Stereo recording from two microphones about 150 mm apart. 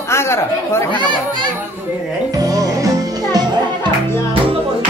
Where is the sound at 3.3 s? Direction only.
30° right (ahead or behind).